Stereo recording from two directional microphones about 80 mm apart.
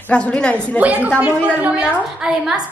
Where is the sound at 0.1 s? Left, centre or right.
Centre.